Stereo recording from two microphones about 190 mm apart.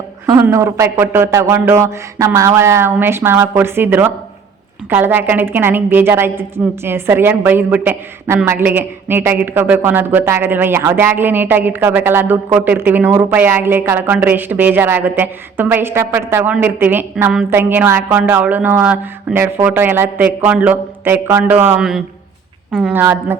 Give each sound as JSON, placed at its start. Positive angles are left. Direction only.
{"t": 0.3, "sound": "a woman's voice", "side_deg": -15}